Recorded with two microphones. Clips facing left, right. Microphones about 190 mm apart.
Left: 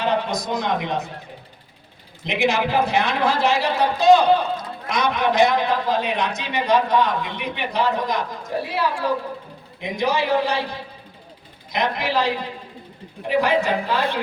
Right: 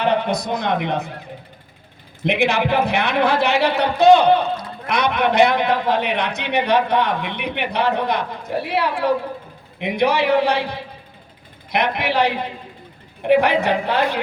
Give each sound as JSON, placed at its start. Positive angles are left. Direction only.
{"t": 0.0, "sound": "a man's voice", "side_deg": -60}
{"t": 2.2, "sound": "a man's voice", "side_deg": -60}